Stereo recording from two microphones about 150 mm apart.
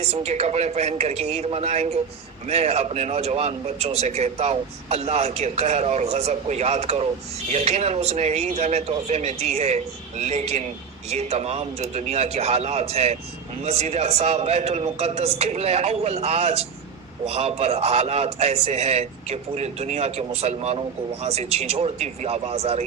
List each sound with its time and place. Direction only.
0.1 s a man's voice: 45° right (ahead or behind)